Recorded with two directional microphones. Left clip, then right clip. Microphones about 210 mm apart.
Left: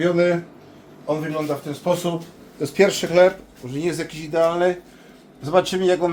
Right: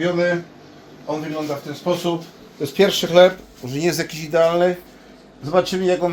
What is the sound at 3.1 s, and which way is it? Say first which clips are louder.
Speech: right 4 dB; 40° right (ahead or behind).